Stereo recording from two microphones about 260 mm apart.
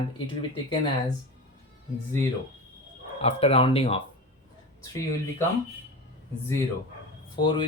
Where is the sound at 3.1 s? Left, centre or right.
Left.